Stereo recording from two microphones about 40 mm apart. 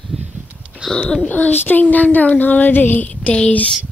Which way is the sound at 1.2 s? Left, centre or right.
Left.